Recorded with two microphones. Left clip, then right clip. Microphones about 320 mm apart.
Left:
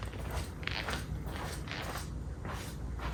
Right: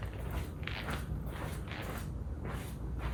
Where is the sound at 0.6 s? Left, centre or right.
Left.